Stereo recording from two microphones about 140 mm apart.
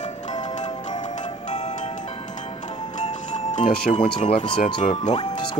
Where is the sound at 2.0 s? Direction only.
40° left (ahead or behind).